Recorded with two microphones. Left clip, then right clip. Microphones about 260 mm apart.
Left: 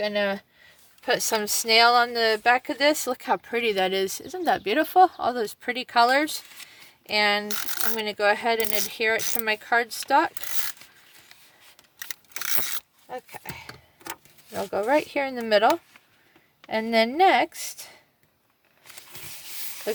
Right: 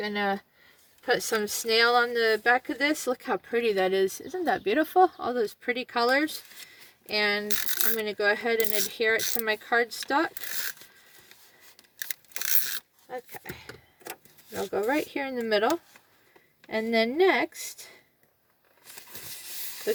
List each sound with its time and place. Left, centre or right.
0.0 s speech: left
13.1 s speech: left
16.6 s speech: left